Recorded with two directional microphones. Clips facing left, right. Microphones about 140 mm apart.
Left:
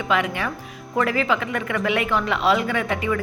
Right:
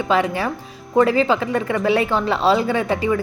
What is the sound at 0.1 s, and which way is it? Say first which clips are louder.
Speech: right 3 dB; 30° right (ahead or behind).